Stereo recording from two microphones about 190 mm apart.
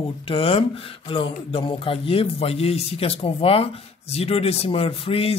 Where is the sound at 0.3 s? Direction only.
30° left (ahead or behind).